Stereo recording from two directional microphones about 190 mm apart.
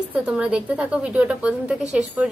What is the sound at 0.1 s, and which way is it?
A woman's voice, 5° right (ahead or behind).